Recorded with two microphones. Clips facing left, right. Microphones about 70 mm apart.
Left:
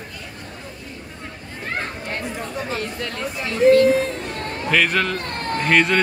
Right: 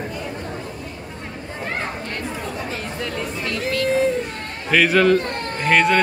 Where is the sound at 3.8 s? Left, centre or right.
Centre.